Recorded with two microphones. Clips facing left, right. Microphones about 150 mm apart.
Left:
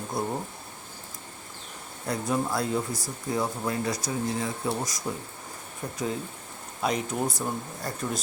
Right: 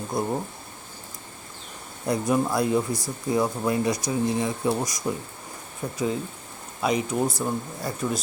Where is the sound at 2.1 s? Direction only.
15° right (ahead or behind).